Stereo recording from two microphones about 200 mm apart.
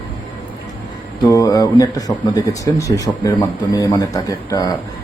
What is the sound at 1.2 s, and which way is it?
A man's voice, 15° left (ahead or behind).